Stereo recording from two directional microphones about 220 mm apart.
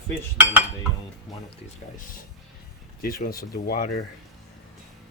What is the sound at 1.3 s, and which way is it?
Speech, centre (ahead or behind).